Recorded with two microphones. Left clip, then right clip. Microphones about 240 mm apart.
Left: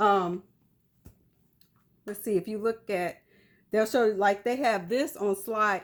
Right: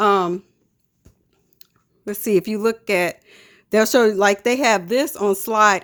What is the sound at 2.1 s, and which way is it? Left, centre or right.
Speech, right.